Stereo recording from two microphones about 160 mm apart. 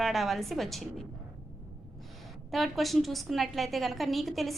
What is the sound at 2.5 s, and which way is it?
A woman's voice, centre (ahead or behind).